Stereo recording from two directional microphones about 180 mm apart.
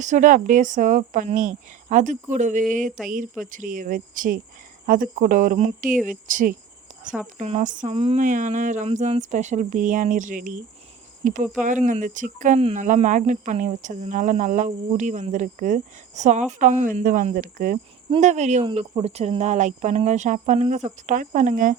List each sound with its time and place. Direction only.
0.0 s speech: 45° right (ahead or behind)